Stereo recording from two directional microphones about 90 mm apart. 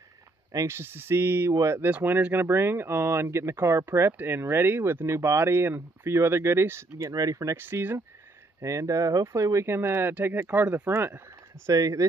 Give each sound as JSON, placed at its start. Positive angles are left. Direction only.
{"t": 0.5, "sound": "speech", "side_deg": -30}
{"t": 1.9, "sound": "speech", "side_deg": -15}
{"t": 7.0, "sound": "speech", "side_deg": -40}
{"t": 7.5, "sound": "speech", "side_deg": -25}
{"t": 8.5, "sound": "speech", "side_deg": -35}
{"t": 11.7, "sound": "speech", "side_deg": -40}